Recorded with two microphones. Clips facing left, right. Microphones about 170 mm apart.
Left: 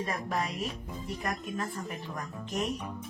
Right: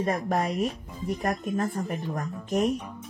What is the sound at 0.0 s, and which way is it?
Speech, 50° right (ahead or behind).